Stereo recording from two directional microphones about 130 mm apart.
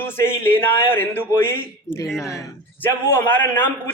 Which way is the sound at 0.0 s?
15° left (ahead or behind).